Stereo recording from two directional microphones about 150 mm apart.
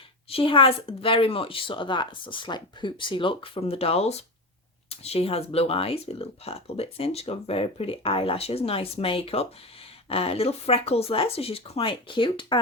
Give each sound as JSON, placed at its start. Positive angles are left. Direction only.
{"t": 0.3, "sound": "speech", "side_deg": 40}